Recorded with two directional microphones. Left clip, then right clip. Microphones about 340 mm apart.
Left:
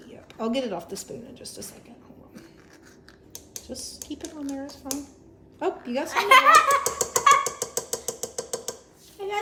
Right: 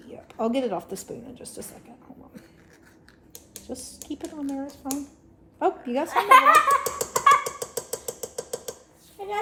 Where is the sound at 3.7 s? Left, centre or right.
Centre.